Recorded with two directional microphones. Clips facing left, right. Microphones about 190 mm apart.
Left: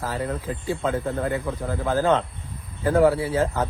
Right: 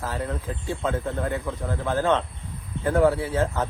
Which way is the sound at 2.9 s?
5° left (ahead or behind).